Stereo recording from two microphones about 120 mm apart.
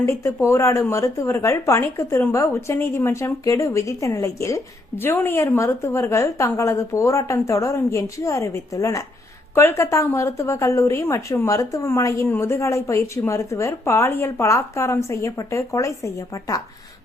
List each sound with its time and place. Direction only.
0.0 s speech: 25° left (ahead or behind)